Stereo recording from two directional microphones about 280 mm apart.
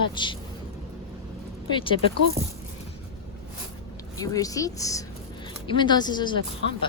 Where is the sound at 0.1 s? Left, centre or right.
Centre.